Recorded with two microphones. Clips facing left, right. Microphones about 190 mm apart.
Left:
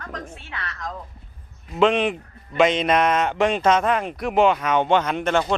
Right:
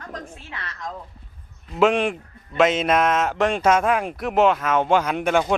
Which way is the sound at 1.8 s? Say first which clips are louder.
Even; 5° right (ahead or behind).